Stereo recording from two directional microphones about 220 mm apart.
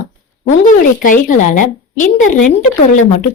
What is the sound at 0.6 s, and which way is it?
Speech, 35° left (ahead or behind).